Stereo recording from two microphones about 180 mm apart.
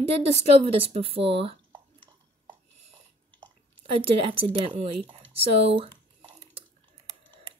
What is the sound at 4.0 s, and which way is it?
Speech, 30° right (ahead or behind).